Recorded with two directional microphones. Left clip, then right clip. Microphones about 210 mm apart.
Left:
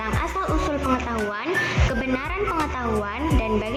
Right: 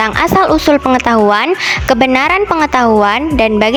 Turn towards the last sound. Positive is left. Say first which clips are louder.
# right 14 dB
turn(degrees=-55)  # may be behind; listen again after turning